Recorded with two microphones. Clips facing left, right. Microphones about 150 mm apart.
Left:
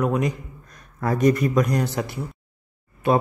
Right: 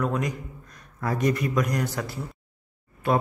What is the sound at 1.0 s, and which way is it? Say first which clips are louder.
A man's voice: left 6 dB; 45° left (ahead or behind).